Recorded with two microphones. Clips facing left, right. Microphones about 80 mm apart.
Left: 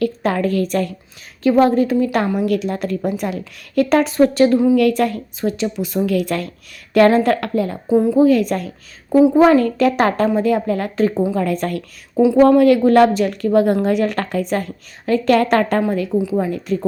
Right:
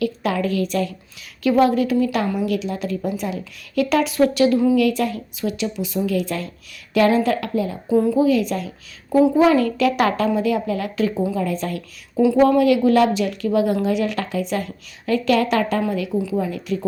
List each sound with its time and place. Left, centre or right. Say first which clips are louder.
0.0 s a woman's voice: left 3 dB; left
1.5 s a woman's voice: left 3 dB; left
4.8 s a woman's voice: left 3 dB; left
6.9 s a woman's voice: left 4 dB; left
7.9 s a woman's voice: left 3 dB; left
8.2 s a woman's voice: left 4 dB; left
11.3 s speech: left 4 dB; left
12.1 s speech: left 3 dB; left
12.4 s a woman's voice: left 5 dB; left
16.1 s a woman's voice: left 4 dB; left
16.4 s a woman's voice: left 4 dB; left